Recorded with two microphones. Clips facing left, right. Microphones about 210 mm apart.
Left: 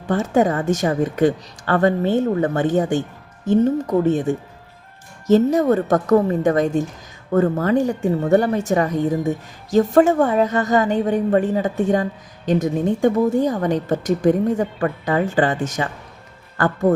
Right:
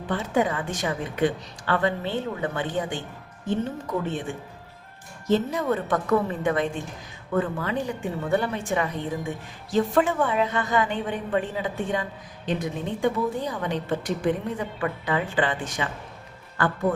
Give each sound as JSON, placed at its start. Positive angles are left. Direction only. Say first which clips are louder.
{"t": 0.1, "sound": "a woman's voice", "louder": "left 7 dB", "side_deg": 45}